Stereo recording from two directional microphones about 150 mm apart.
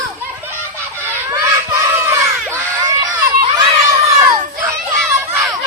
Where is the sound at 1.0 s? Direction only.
15° right (ahead or behind).